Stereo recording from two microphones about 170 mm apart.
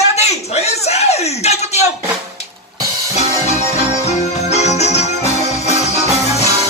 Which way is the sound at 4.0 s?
40° left (ahead or behind).